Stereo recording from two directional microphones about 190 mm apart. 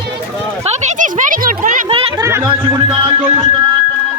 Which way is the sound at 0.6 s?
40° right (ahead or behind).